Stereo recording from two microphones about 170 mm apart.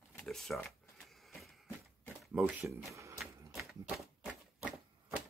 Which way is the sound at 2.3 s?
10° right (ahead or behind).